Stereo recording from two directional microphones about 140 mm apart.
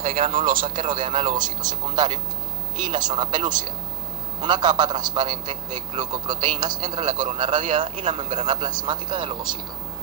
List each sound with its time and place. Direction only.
0.1 s a man's voice: 40° right (ahead or behind)